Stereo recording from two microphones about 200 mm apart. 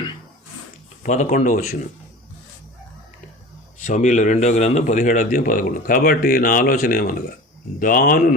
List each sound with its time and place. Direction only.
1.0 s speech: 35° left (ahead or behind)
3.8 s a man's voice: 40° left (ahead or behind)